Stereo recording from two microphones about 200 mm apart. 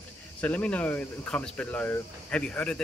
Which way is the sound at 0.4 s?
5° left (ahead or behind).